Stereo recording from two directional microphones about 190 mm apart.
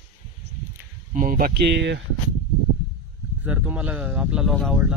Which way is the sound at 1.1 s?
45° right (ahead or behind).